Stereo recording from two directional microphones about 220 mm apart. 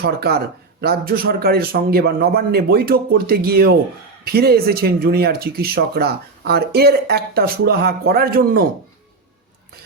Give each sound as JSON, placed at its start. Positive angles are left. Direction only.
{"t": 0.0, "sound": "speech", "side_deg": -45}